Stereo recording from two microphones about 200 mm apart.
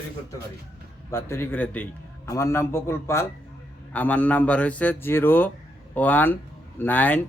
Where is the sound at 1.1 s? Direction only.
10° left (ahead or behind).